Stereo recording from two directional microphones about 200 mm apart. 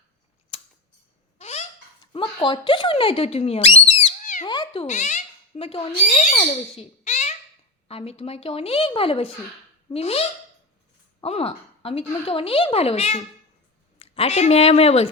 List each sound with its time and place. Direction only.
0.5 s scissors: 25° left (ahead or behind)
1.4 s a sound: 35° left (ahead or behind)
2.1 s speech: 25° left (ahead or behind)
4.4 s a woman's voice: 20° left (ahead or behind)